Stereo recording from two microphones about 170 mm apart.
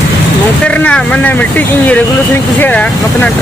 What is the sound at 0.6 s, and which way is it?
Speech, 10° left (ahead or behind).